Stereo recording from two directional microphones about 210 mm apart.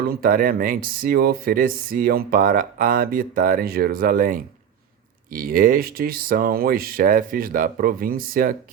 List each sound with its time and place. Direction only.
0.1 s speech: 40° right (ahead or behind)